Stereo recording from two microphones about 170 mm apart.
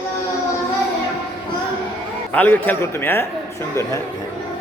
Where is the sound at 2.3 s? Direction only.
10° left (ahead or behind).